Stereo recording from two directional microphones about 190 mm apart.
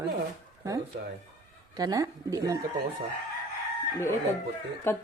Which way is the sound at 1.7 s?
20° right (ahead or behind).